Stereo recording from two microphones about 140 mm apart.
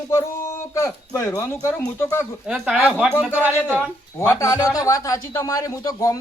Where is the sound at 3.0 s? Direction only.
5° right (ahead or behind).